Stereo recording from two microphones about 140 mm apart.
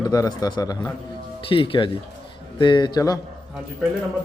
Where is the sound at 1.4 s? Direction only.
40° left (ahead or behind).